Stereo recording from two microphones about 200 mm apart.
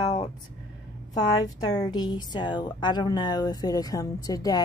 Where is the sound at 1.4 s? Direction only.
20° left (ahead or behind).